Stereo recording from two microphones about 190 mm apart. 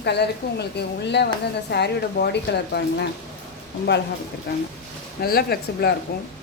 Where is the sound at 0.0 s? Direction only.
60° left (ahead or behind).